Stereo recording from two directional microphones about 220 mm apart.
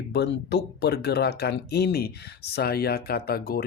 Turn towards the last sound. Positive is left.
turn(degrees=45)  # may be behind; listen again after turning